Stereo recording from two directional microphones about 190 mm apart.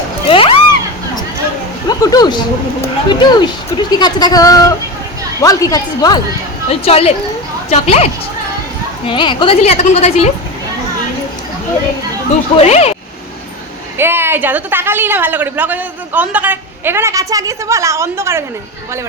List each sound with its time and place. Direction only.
0.3 s a sound: 30° left (ahead or behind)
1.9 s a sound: 20° left (ahead or behind)
2.8 s speech: 25° left (ahead or behind)
6.7 s a woman's voice: 30° left (ahead or behind)
12.5 s a woman's voice: 35° left (ahead or behind)
14.0 s a woman's voice: 10° right (ahead or behind)